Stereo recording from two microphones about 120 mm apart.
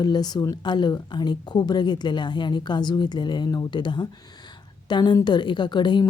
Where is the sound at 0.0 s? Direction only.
35° left (ahead or behind).